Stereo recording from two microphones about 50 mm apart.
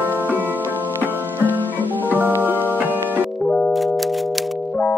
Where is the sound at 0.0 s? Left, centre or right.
Right.